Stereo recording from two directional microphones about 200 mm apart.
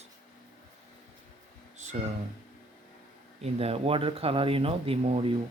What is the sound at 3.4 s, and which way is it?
Speech, 30° right (ahead or behind).